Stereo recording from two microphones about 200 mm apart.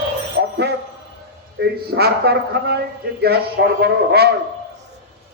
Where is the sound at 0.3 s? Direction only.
55° right (ahead or behind).